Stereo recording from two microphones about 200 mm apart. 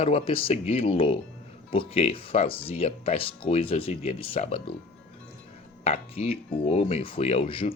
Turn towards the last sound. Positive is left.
turn(degrees=30)  # may be behind; listen again after turning